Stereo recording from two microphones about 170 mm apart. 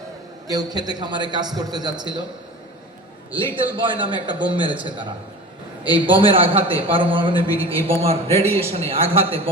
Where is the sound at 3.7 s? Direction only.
30° right (ahead or behind).